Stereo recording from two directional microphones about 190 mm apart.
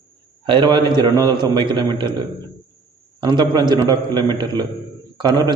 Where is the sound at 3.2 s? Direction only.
25° right (ahead or behind).